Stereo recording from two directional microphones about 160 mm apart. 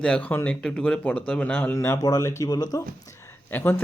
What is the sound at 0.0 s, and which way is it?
Speech, 5° left (ahead or behind).